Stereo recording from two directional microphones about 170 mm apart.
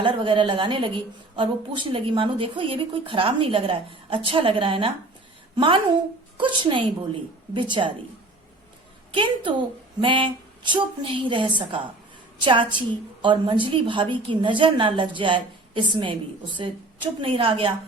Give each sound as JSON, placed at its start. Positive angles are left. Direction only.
{"t": 0.0, "sound": "a woman's voice", "side_deg": -30}
{"t": 9.1, "sound": "a woman's voice", "side_deg": -30}